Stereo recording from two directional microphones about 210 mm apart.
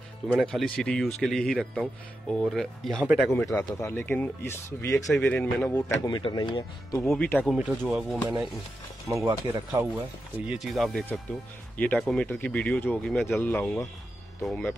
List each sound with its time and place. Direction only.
0.3 s speech: centre (ahead or behind)
3.3 s speech: 10° left (ahead or behind)
4.9 s speech: centre (ahead or behind)
6.0 s speech: 20° left (ahead or behind)
7.1 s speech: 5° left (ahead or behind)
7.5 s speech: 5° right (ahead or behind)